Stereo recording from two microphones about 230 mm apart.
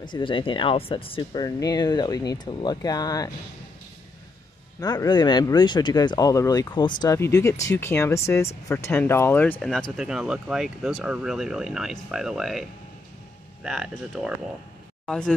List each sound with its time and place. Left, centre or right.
0.0 s speech: left
4.7 s speech: centre